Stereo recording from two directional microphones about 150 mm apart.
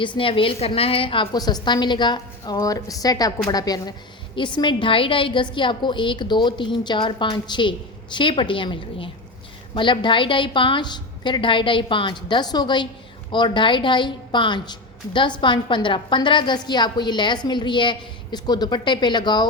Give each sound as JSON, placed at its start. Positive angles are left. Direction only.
{"t": 0.2, "sound": "a woman's voice", "side_deg": 35}